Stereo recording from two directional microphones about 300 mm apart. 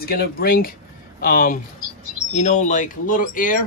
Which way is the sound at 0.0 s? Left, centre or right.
Left.